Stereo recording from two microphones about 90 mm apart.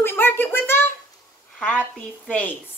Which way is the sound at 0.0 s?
25° left (ahead or behind).